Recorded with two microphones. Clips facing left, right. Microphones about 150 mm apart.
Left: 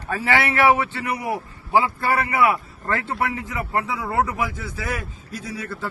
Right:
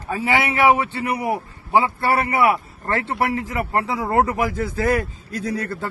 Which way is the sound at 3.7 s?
35° right (ahead or behind).